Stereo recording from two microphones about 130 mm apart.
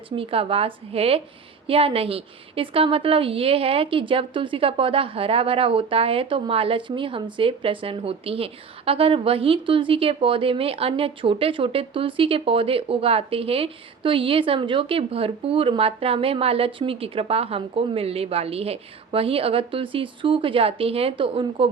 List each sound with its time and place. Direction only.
0.2 s a woman's voice: 45° right (ahead or behind)